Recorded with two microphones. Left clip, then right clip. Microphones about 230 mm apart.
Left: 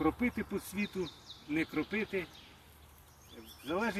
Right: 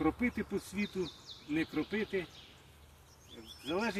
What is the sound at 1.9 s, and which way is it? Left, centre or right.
Speech, centre.